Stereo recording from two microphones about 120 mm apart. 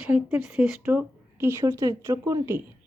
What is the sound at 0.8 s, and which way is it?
A woman's voice, 15° right (ahead or behind).